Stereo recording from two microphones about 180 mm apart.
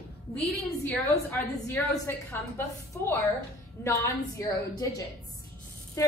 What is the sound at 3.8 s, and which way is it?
A woman's voice, 15° left (ahead or behind).